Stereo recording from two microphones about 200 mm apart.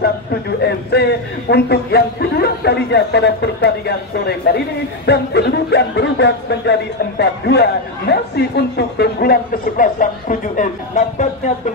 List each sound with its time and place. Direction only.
0.0 s speech: 55° left (ahead or behind); by 11.7 s 35° left (ahead or behind)